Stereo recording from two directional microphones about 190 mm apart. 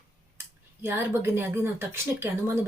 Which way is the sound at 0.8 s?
10° right (ahead or behind).